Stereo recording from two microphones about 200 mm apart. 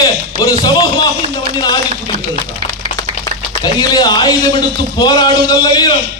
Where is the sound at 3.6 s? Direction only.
20° left (ahead or behind).